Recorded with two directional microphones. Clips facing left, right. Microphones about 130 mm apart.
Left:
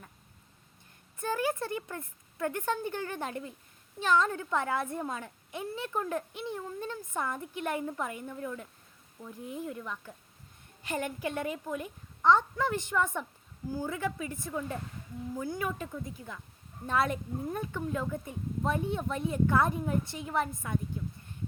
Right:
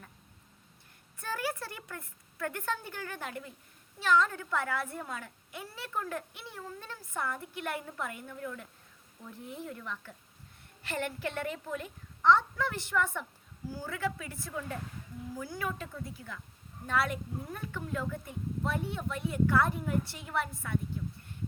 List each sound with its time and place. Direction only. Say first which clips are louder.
1.2 s speech: left 5 dB; 20° left (ahead or behind)